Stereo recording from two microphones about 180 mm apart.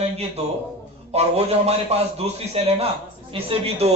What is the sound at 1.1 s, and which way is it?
A man's voice, 35° right (ahead or behind).